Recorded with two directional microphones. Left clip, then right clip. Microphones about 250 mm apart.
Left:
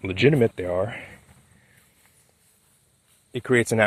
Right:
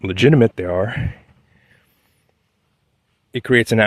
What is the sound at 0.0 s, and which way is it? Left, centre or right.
Speech, right.